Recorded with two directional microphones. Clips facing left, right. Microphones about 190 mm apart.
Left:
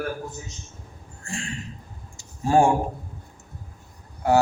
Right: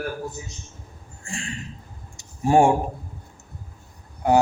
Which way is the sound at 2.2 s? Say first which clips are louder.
Right 2 dB; 20° right (ahead or behind).